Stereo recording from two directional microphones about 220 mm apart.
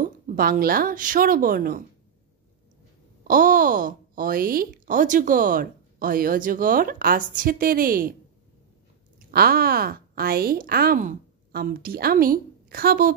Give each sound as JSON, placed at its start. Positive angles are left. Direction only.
{"t": 0.0, "sound": "speech", "side_deg": -40}
{"t": 3.3, "sound": "speech", "side_deg": -40}
{"t": 9.3, "sound": "speech", "side_deg": -45}